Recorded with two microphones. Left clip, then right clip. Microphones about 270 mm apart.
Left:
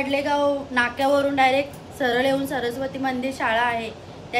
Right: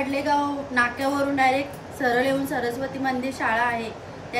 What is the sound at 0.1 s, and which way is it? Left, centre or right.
A woman's voice, centre.